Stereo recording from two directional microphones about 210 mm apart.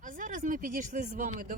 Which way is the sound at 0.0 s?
40° right (ahead or behind).